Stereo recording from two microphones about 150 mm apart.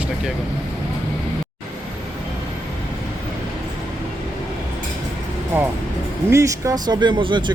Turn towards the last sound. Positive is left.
turn(degrees=-30)  # may be behind; listen again after turning